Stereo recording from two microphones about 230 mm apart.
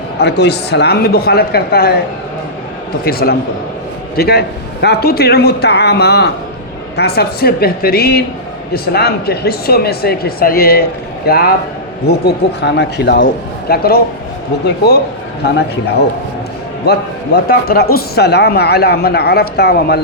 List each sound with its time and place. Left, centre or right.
0.2 s a man's voice: left
3.0 s a man's voice: left
16.8 s a man's voice: left